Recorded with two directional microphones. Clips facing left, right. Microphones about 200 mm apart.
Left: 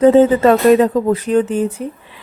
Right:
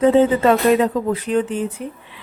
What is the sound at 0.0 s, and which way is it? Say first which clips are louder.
Speech: left 4 dB; 45° left (ahead or behind).